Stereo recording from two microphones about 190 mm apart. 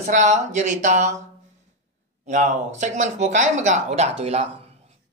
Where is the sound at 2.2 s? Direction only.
40° right (ahead or behind).